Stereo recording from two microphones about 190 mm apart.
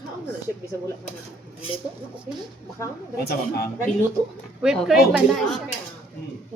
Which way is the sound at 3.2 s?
55° left (ahead or behind).